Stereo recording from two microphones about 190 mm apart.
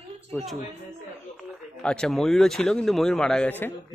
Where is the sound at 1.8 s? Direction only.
5° left (ahead or behind).